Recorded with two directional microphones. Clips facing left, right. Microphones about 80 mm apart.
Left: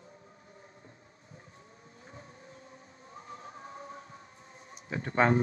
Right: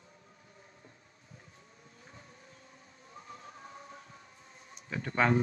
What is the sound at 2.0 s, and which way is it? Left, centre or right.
Vehicle, left.